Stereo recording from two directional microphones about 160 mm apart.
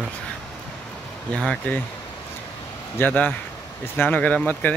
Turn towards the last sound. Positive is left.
turn(degrees=10)  # may be behind; listen again after turning